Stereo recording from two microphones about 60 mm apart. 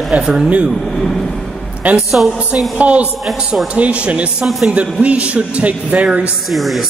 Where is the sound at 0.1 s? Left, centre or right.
Centre.